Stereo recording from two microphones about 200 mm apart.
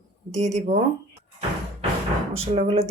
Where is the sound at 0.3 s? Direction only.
35° right (ahead or behind).